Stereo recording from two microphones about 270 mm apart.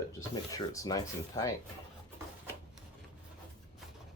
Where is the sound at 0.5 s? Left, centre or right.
Centre.